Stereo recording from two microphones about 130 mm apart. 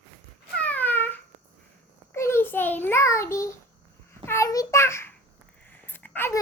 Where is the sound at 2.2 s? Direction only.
20° left (ahead or behind).